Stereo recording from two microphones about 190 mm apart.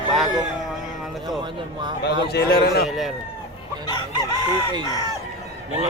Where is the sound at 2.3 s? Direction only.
55° left (ahead or behind).